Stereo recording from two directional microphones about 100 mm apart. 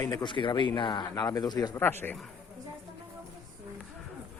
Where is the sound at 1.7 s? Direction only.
20° left (ahead or behind).